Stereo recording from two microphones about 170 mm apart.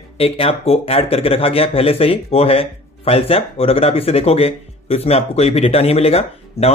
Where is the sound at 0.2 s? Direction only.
35° left (ahead or behind).